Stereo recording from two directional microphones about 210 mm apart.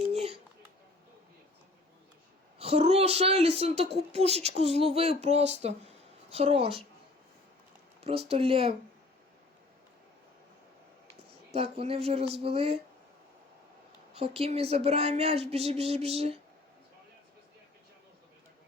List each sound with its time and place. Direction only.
0.1 s a sound: 30° right (ahead or behind)
2.6 s speech: 30° right (ahead or behind)
8.0 s speech: 30° right (ahead or behind)
11.5 s speech: 25° right (ahead or behind)
14.1 s speech: 30° right (ahead or behind)